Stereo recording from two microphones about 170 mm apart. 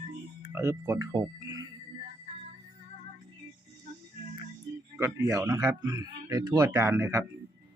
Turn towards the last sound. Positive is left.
turn(degrees=-15)  # may be behind; listen again after turning